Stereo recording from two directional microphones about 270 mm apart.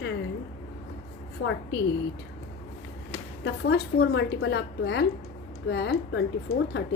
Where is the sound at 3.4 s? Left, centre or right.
Left.